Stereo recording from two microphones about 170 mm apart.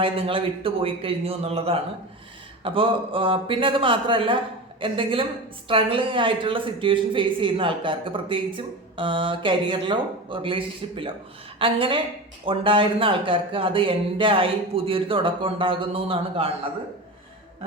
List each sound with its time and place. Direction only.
0.0 s speech: 30° right (ahead or behind)